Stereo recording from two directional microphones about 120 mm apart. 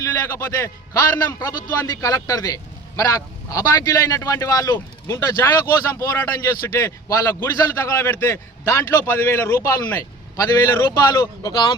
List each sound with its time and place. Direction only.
0.0 s a man's voice: 25° left (ahead or behind)